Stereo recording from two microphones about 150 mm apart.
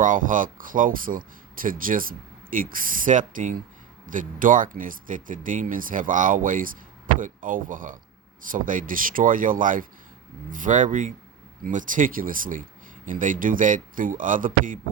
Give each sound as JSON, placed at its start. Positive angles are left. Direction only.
{"t": 0.0, "sound": "speech", "side_deg": -60}